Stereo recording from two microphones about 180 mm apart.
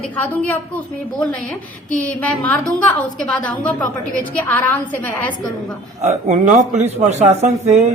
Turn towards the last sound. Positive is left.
turn(degrees=-40)  # may be behind; listen again after turning